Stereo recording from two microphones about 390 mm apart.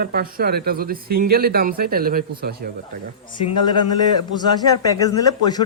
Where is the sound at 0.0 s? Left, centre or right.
Right.